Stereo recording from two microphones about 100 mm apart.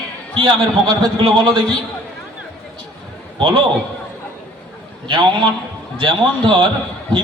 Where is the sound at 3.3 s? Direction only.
60° right (ahead or behind).